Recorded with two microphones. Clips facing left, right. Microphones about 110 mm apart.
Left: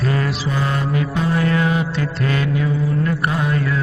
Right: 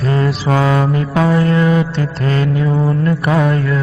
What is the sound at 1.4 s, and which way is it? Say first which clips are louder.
Mantra: right 5 dB; 35° right (ahead or behind).